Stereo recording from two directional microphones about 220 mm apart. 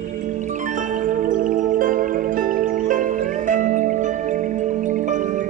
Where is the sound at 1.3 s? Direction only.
35° right (ahead or behind).